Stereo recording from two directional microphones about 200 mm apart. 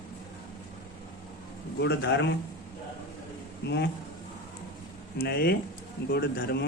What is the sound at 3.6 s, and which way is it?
Speech, 60° left (ahead or behind).